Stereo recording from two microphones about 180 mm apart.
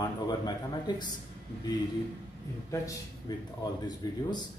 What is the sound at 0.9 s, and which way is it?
Speech, 25° left (ahead or behind).